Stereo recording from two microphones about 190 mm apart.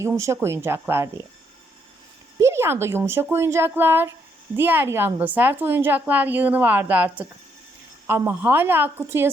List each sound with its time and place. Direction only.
0.0 s a woman's voice: 15° right (ahead or behind)
2.4 s a woman's voice: 15° right (ahead or behind)